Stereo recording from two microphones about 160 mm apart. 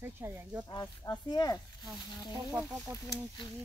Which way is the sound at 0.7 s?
25° left (ahead or behind).